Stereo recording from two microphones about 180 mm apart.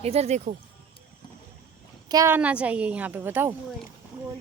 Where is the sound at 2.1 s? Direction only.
15° right (ahead or behind).